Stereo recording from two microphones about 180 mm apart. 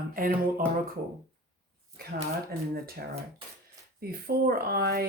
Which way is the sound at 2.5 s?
60° right (ahead or behind).